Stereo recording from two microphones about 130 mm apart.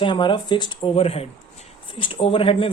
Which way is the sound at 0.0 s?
40° left (ahead or behind).